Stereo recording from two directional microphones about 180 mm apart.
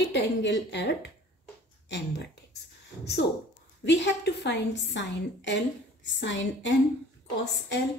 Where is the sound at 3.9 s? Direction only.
70° left (ahead or behind); by 6.7 s 90° left.